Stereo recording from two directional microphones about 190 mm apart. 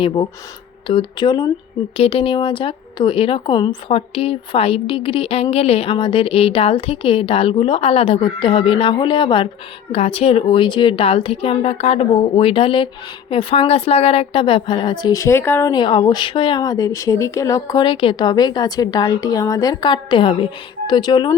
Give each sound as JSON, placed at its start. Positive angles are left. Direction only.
{"t": 0.0, "sound": "speech", "side_deg": 25}